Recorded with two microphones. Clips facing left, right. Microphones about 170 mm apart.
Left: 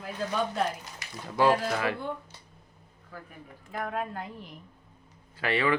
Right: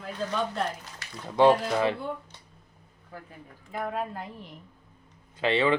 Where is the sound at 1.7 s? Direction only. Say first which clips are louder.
Right 4 dB; 25° right (ahead or behind).